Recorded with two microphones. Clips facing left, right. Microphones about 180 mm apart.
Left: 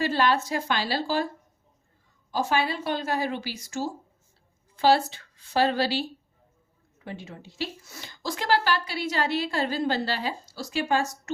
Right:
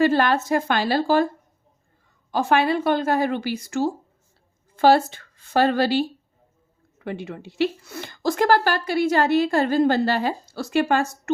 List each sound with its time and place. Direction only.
0.0 s a woman's voice: 50° right (ahead or behind)
2.3 s speech: 60° right (ahead or behind)
4.8 s a woman's voice: 50° right (ahead or behind)